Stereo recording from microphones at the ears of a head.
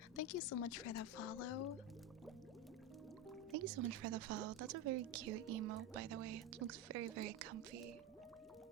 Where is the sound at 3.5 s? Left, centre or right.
Right.